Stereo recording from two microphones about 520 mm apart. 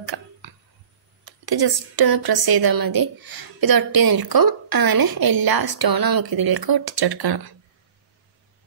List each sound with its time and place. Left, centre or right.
0.0 s tick-tock: right
1.2 s a woman's voice: right